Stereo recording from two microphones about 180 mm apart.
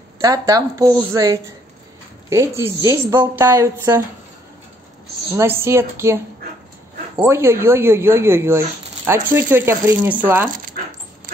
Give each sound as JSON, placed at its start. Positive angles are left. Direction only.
{"t": 0.2, "sound": "a woman's voice", "side_deg": -20}
{"t": 5.3, "sound": "speech", "side_deg": -15}
{"t": 7.2, "sound": "speech", "side_deg": -15}